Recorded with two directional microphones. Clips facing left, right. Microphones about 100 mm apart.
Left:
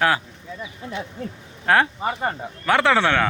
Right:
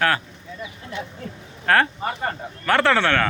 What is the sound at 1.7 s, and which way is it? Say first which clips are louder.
Speech: left 1 dB; 15° left (ahead or behind).